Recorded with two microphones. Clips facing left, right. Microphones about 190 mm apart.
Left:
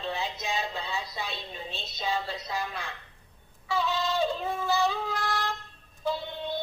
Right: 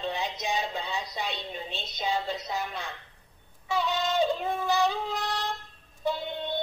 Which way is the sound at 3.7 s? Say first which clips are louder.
Right 1 dB; 20° right (ahead or behind).